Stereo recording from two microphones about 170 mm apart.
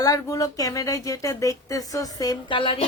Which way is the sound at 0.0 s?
20° left (ahead or behind).